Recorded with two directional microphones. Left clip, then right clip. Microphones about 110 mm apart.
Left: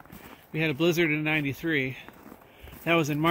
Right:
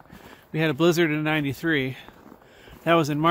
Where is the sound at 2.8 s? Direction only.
40° right (ahead or behind).